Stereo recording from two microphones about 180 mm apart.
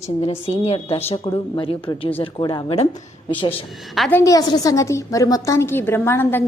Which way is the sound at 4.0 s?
10° left (ahead or behind).